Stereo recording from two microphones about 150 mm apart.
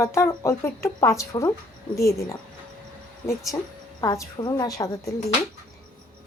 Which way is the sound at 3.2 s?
20° left (ahead or behind).